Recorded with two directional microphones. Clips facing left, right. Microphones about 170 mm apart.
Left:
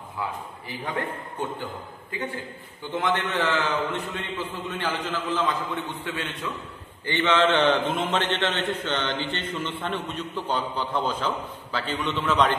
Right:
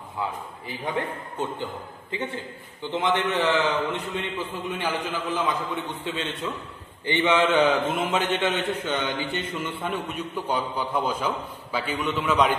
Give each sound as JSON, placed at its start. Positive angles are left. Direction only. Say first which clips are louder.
{"t": 0.2, "sound": "a man's voice", "louder": "right 1 dB", "side_deg": -20}
{"t": 7.1, "sound": "a man's voice", "louder": "even", "side_deg": -15}